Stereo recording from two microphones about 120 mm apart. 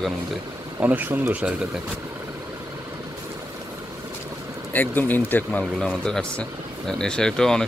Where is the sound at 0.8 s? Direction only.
15° right (ahead or behind).